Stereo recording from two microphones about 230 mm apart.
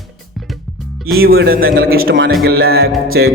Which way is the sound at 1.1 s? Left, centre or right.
Right.